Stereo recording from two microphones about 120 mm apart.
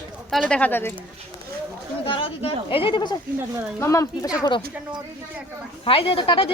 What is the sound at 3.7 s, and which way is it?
Speech, 25° left (ahead or behind).